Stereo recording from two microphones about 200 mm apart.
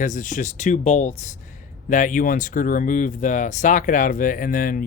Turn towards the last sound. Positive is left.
turn(degrees=45)  # may be behind; listen again after turning